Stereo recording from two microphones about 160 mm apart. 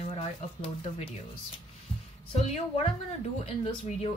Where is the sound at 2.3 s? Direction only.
40° left (ahead or behind).